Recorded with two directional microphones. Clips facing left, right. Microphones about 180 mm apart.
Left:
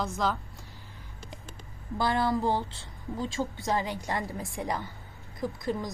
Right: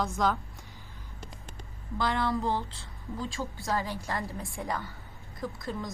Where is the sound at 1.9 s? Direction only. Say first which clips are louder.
Left 2 dB; 30° left (ahead or behind).